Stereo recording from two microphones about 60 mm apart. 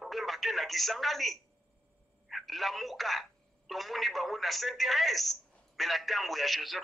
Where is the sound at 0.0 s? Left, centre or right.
Centre.